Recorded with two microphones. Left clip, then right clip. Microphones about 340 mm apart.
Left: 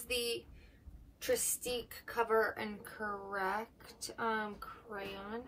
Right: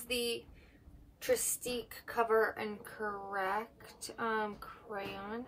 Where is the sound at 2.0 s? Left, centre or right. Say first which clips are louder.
Right 2 dB; centre.